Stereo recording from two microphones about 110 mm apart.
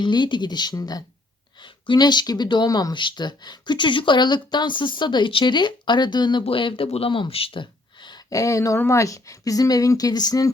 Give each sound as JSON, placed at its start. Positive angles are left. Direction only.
{"t": 0.0, "sound": "speech", "side_deg": 45}
{"t": 2.9, "sound": "speech", "side_deg": 45}
{"t": 6.4, "sound": "speech", "side_deg": 55}
{"t": 6.8, "sound": "speech", "side_deg": 65}
{"t": 8.3, "sound": "speech", "side_deg": 30}